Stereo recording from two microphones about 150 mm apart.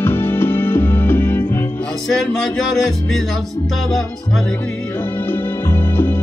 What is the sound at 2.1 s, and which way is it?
Music, centre (ahead or behind).